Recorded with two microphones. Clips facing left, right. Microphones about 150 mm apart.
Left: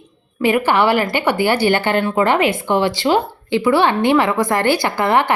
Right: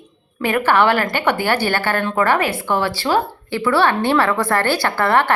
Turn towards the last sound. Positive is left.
turn(degrees=15)  # may be behind; listen again after turning